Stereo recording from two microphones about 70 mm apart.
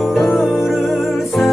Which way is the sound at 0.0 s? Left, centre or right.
Centre.